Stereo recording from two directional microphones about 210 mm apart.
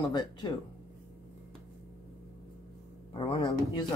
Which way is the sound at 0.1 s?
20° left (ahead or behind).